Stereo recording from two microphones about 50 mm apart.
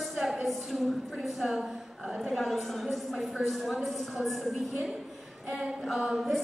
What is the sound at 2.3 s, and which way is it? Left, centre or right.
Speech, centre.